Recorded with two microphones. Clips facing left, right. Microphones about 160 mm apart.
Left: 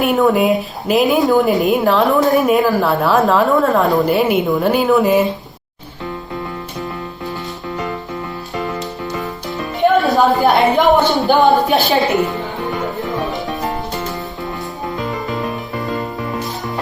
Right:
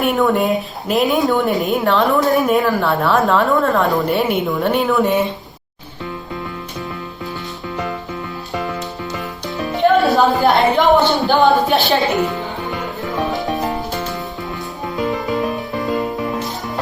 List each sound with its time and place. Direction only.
0.0 s a woman's voice: centre (ahead or behind)
10.4 s a woman's voice: centre (ahead or behind)
15.4 s music: centre (ahead or behind)
15.8 s music: 20° right (ahead or behind)